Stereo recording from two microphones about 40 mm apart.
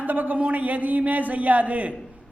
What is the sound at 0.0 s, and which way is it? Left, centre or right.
A man's voice, right.